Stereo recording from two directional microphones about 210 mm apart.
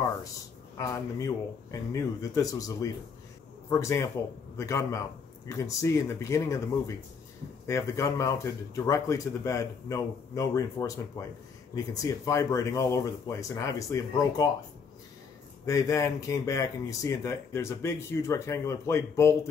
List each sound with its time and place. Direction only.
0.7 s a man's voice: 15° left (ahead or behind)
7.6 s speech: 15° left (ahead or behind)
15.6 s speech: 15° left (ahead or behind)